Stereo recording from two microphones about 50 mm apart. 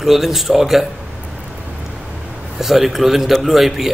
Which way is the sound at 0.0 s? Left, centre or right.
Centre.